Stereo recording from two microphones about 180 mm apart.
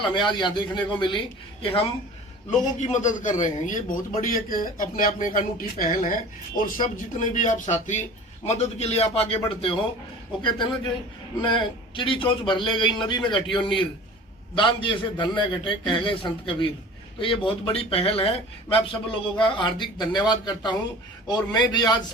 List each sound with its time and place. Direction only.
0.1 s a man's voice: 25° left (ahead or behind)
11.4 s speech: 25° left (ahead or behind)